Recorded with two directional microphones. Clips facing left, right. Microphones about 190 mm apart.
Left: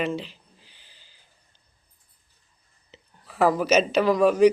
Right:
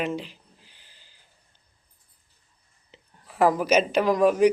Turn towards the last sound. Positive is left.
turn(degrees=-10)  # may be behind; listen again after turning